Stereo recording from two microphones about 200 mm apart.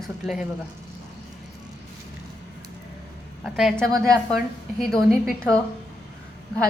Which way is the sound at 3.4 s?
Centre (ahead or behind).